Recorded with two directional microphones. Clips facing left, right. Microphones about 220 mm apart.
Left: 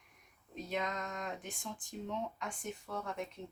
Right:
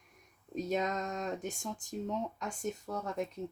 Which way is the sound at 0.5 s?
40° right (ahead or behind).